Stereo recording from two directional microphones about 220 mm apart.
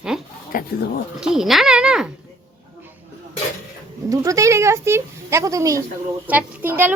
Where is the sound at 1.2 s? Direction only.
Centre (ahead or behind).